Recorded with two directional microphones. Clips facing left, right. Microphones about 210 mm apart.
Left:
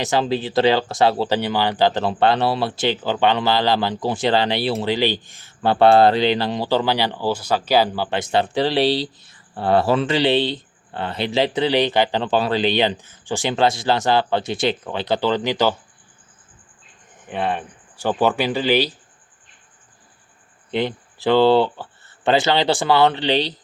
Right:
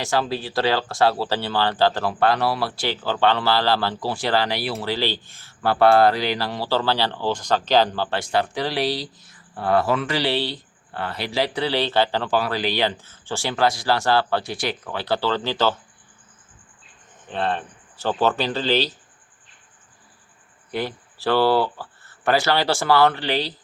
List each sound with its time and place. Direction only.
0.0 s speech: 20° left (ahead or behind)
17.2 s speech: 10° left (ahead or behind)
20.7 s speech: 20° left (ahead or behind)